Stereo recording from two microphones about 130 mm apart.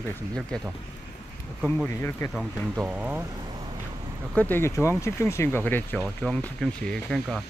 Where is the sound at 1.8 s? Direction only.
20° left (ahead or behind).